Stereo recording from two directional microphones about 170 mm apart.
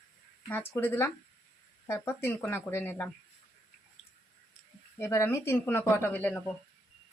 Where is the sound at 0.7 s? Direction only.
10° left (ahead or behind).